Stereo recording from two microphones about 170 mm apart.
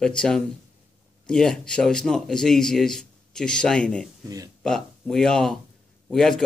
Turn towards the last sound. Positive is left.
turn(degrees=5)  # may be behind; listen again after turning